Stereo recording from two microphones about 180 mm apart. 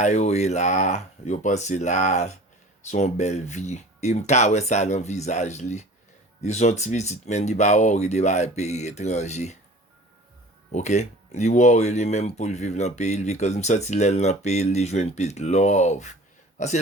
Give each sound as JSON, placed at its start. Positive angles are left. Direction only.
{"t": 0.0, "sound": "speech", "side_deg": 40}
{"t": 10.7, "sound": "speech", "side_deg": 40}